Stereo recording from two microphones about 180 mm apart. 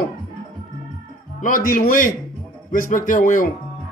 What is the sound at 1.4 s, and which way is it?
A man's voice, 50° left (ahead or behind).